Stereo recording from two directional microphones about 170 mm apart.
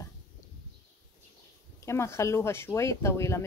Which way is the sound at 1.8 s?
15° left (ahead or behind).